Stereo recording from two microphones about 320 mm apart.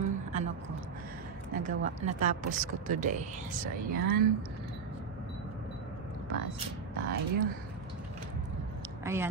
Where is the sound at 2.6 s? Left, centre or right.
Right.